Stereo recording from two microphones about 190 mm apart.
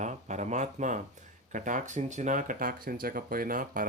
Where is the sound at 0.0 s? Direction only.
40° right (ahead or behind).